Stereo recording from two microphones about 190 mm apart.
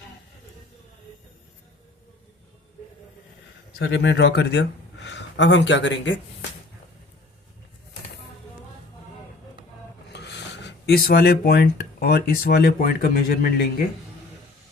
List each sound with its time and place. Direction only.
3.8 s speech: 65° left (ahead or behind)
10.1 s speech: 65° left (ahead or behind)